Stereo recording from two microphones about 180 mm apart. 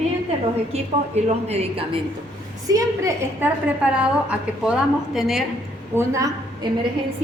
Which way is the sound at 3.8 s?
5° right (ahead or behind).